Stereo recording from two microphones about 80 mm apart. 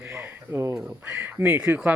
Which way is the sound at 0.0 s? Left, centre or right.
Right.